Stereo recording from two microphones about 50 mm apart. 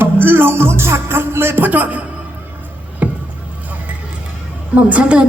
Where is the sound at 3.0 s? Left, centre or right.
Right.